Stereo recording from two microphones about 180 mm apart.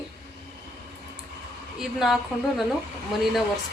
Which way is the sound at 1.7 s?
Centre (ahead or behind).